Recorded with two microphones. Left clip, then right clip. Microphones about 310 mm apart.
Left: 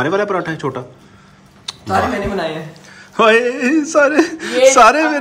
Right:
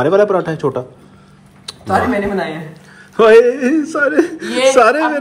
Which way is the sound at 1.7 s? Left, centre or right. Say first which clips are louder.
Left 3 dB; centre.